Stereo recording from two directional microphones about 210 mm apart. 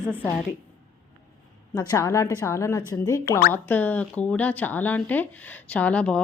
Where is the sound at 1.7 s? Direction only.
15° left (ahead or behind).